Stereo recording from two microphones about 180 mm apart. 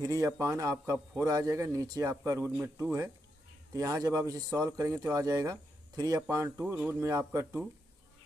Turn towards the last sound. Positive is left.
turn(degrees=-15)  # may be behind; listen again after turning